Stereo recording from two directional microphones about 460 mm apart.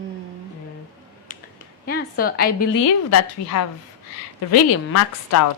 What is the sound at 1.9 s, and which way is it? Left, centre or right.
Speech, centre.